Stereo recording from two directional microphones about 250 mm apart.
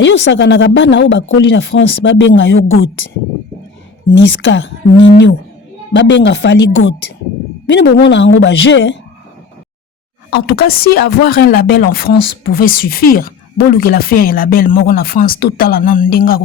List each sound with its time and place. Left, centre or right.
0.0 s speech: left
4.1 s speech: left
10.2 s speech: left